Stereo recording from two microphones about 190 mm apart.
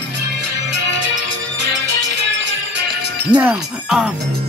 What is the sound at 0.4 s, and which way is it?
Music, 65° right (ahead or behind).